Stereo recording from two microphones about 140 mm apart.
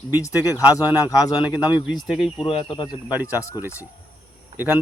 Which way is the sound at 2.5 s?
35° left (ahead or behind).